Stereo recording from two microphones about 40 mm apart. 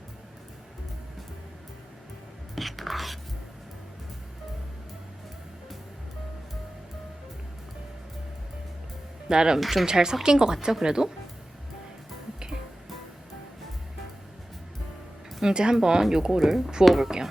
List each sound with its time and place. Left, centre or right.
2.6 s whispering: centre
9.3 s speech: centre
9.6 s speech: centre
9.8 s speech: centre
15.4 s speech: centre
16.4 s speech: centre